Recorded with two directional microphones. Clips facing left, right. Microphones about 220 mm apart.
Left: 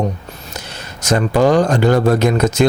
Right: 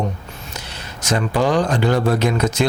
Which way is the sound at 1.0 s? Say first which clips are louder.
Left 5 dB; 45° left (ahead or behind).